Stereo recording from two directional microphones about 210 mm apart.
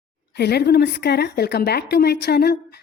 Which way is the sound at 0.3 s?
50° left (ahead or behind).